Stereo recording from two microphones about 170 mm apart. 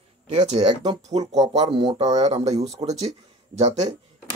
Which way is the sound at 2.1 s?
40° right (ahead or behind).